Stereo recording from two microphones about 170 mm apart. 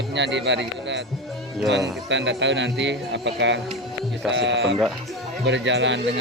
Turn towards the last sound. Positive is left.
turn(degrees=-90)